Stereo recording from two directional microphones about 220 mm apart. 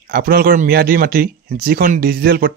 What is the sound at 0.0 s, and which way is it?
Speech, 40° right (ahead or behind).